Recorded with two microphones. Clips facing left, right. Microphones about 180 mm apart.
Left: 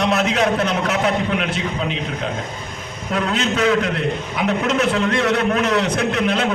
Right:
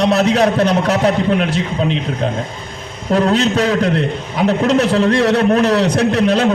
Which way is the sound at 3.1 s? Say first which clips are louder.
Right 7 dB; 35° right (ahead or behind).